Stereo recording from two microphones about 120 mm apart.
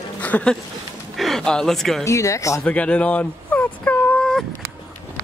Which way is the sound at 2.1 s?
25° left (ahead or behind).